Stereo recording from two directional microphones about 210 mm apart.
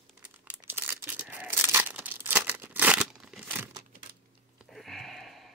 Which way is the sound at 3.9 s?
45° right (ahead or behind).